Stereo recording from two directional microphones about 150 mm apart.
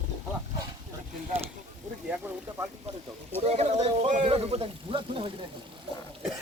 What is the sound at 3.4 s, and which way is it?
A man's voice, 45° right (ahead or behind).